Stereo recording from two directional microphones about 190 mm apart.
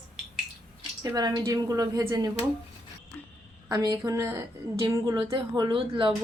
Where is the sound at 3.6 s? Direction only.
20° right (ahead or behind).